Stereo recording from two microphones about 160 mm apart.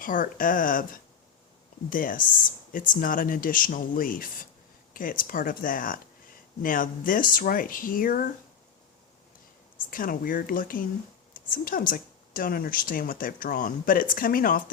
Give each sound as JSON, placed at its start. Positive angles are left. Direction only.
{"t": 0.0, "sound": "speech", "side_deg": 60}
{"t": 9.7, "sound": "speech", "side_deg": 60}